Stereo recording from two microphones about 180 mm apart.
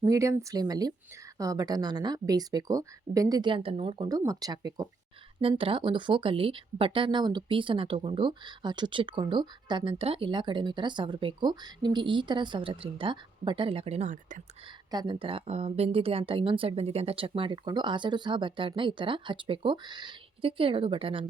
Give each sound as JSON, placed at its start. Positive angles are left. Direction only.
{"t": 0.0, "sound": "speech", "side_deg": -15}
{"t": 14.8, "sound": "speech", "side_deg": -25}